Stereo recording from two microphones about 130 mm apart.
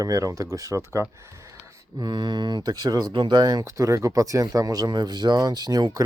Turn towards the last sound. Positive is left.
turn(degrees=-30)  # may be behind; listen again after turning